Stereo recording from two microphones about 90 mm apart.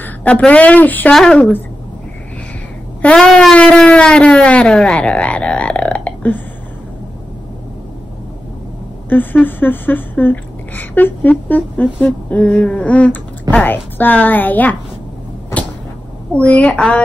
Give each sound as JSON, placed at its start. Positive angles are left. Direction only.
{"t": 0.0, "sound": "a woman's voice", "side_deg": 15}
{"t": 3.0, "sound": "speech", "side_deg": 10}
{"t": 9.1, "sound": "speech", "side_deg": 20}
{"t": 16.3, "sound": "a woman's voice", "side_deg": 15}